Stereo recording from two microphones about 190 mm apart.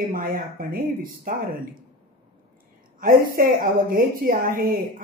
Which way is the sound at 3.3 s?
50° right (ahead or behind).